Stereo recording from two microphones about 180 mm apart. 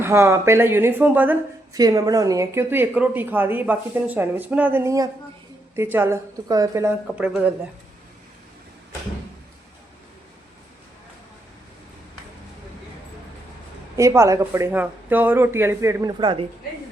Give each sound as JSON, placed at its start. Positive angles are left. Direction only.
{"t": 0.0, "sound": "a woman's voice", "side_deg": -15}
{"t": 1.8, "sound": "a woman's voice", "side_deg": -20}
{"t": 13.9, "sound": "a woman's voice", "side_deg": -15}